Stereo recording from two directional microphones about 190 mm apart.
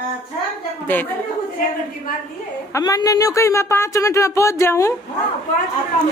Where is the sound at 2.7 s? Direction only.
20° left (ahead or behind).